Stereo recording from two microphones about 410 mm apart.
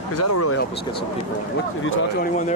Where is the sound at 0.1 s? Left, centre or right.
Left.